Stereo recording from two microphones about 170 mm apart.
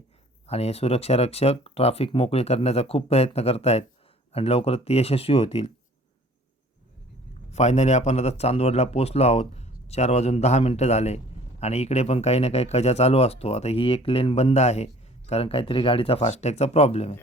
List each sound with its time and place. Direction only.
0.4 s speech: 40° left (ahead or behind)
7.5 s speech: 40° left (ahead or behind)